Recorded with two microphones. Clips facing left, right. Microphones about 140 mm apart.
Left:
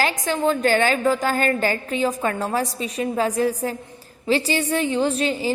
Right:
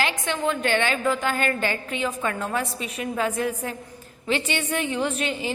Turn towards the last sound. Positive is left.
turn(degrees=35)  # may be behind; listen again after turning